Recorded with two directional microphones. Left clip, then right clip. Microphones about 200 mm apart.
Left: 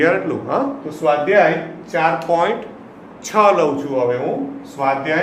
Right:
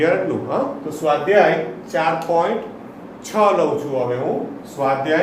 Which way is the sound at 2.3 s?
35° left (ahead or behind).